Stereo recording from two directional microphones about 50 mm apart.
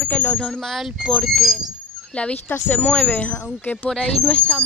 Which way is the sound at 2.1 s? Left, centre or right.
Left.